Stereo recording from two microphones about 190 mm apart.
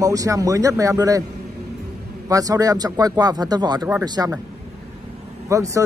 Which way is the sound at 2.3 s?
20° right (ahead or behind).